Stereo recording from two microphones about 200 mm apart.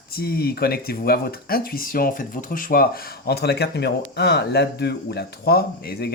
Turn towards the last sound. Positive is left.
turn(degrees=50)  # may be behind; listen again after turning